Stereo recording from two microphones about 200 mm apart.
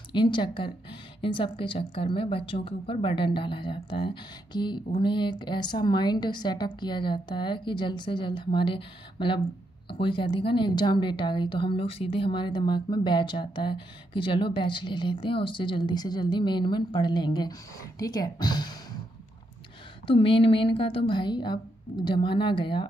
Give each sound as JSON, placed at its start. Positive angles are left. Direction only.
{"t": 0.1, "sound": "a woman's voice", "side_deg": 25}
{"t": 20.1, "sound": "a woman's voice", "side_deg": 25}